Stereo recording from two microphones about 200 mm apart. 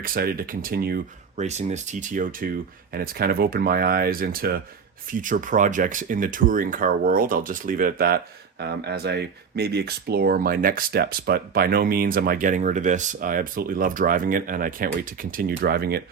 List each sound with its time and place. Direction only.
0.0 s speech: 45° right (ahead or behind)
1.4 s speech: 35° right (ahead or behind)